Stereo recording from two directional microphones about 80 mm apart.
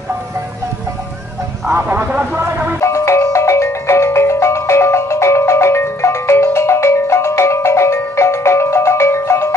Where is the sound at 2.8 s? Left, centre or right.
Left.